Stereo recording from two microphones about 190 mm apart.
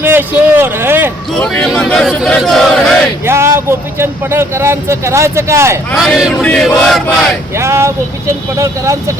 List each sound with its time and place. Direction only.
0.0 s speech: 10° right (ahead or behind)
1.4 s speech: 5° left (ahead or behind)
3.2 s speech: 15° right (ahead or behind)
5.9 s speech: centre (ahead or behind)
7.5 s speech: 15° right (ahead or behind)